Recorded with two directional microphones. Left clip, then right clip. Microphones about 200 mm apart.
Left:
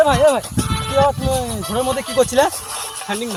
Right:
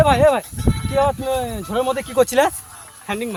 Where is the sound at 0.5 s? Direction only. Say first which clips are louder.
Left 2 dB; 45° left (ahead or behind).